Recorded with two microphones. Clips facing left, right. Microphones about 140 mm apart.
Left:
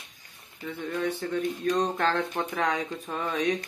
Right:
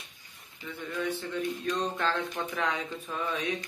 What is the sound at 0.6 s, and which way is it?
Speech, 50° left (ahead or behind).